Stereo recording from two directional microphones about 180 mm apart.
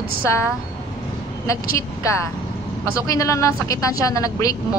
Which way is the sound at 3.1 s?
20° left (ahead or behind).